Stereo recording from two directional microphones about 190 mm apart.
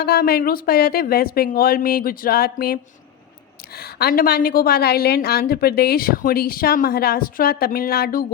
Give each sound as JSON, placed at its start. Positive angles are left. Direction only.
{"t": 0.0, "sound": "a woman's voice", "side_deg": 55}
{"t": 3.8, "sound": "a woman's voice", "side_deg": 55}